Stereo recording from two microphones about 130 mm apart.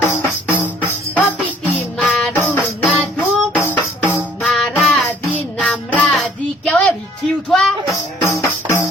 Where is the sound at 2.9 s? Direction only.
10° left (ahead or behind).